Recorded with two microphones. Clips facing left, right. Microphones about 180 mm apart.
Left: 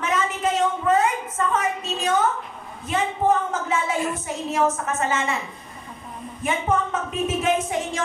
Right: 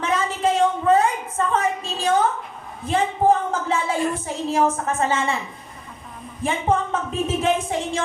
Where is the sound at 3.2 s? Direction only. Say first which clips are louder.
Right 2 dB; 35° right (ahead or behind).